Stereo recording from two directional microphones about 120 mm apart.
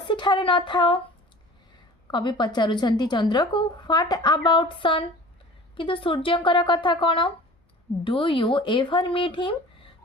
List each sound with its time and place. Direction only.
0.0 s speech: 40° left (ahead or behind)
2.0 s a woman's voice: 40° left (ahead or behind)